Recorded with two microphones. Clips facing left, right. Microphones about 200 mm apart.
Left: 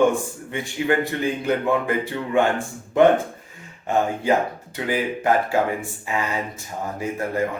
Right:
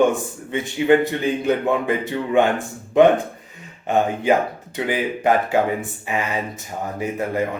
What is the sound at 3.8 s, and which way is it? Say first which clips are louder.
Speech: right 2 dB; 20° right (ahead or behind).